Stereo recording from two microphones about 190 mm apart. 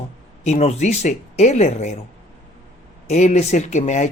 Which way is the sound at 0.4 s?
35° left (ahead or behind).